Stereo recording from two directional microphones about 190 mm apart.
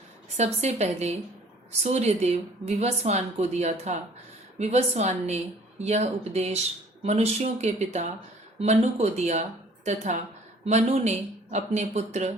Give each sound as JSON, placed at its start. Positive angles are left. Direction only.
{"t": 0.3, "sound": "speech", "side_deg": -35}